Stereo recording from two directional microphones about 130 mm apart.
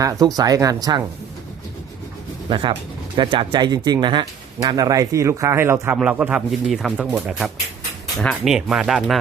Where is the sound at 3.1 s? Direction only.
40° right (ahead or behind); by 5.9 s 20° right (ahead or behind).